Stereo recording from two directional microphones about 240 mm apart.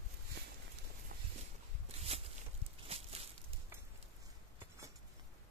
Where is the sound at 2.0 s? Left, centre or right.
Right.